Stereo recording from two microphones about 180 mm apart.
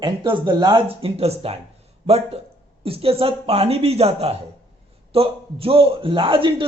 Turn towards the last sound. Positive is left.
turn(degrees=-30)  # may be behind; listen again after turning